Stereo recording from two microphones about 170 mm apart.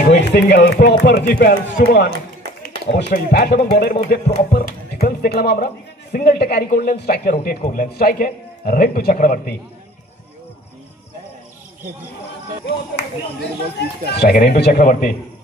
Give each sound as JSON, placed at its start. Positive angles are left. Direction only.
{"t": 0.1, "sound": "a man's voice", "side_deg": 80}
{"t": 13.7, "sound": "speech", "side_deg": 75}
{"t": 14.8, "sound": "a man's voice", "side_deg": 55}